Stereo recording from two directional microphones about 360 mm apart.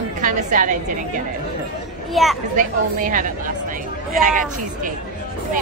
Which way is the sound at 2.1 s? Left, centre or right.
Centre.